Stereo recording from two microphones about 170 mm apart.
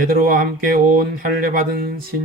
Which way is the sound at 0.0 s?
55° right (ahead or behind).